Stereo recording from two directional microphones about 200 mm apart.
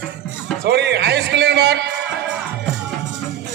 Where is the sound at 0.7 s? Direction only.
55° right (ahead or behind).